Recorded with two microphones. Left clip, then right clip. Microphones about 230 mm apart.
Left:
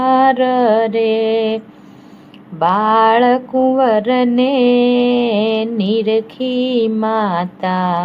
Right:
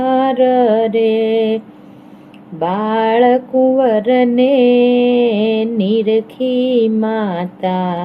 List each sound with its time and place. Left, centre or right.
0.0 s mantra: left
2.6 s music: left